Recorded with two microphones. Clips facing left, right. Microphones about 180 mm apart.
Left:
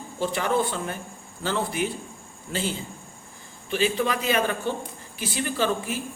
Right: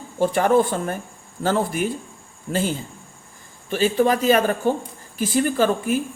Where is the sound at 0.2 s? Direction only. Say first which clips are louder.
Right 7 dB; 50° right (ahead or behind).